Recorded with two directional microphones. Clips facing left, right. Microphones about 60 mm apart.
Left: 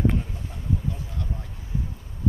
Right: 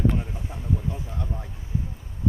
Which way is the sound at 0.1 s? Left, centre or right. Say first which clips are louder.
Even; centre.